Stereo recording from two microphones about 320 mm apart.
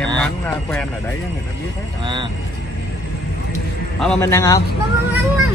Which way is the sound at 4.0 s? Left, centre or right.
Centre.